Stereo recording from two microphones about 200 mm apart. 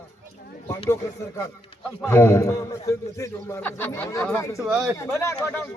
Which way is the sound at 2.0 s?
10° left (ahead or behind).